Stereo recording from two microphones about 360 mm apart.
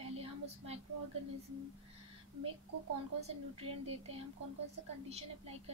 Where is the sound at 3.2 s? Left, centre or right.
Centre.